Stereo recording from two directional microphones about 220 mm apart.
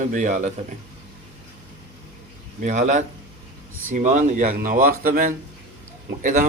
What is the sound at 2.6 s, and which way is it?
Speech, 35° right (ahead or behind).